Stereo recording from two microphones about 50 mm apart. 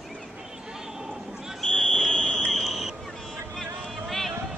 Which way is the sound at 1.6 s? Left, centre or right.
Centre.